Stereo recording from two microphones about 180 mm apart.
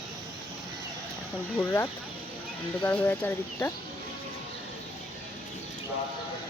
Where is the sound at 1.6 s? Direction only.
10° left (ahead or behind).